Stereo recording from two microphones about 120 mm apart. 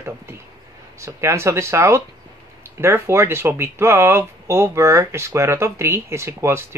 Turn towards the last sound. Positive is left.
turn(degrees=-20)  # may be behind; listen again after turning